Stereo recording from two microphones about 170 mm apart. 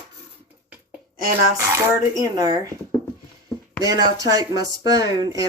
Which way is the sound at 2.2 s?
20° right (ahead or behind).